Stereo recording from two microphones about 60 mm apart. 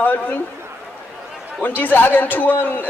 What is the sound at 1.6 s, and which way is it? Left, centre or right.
Speech, left.